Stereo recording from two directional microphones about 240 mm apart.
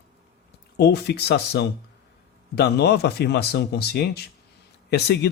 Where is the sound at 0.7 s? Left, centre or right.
Left.